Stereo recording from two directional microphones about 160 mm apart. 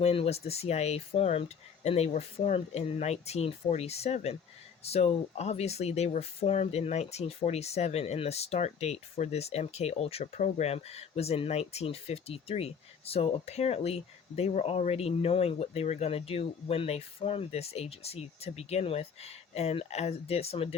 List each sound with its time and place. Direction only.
0.0 s speech: 40° left (ahead or behind)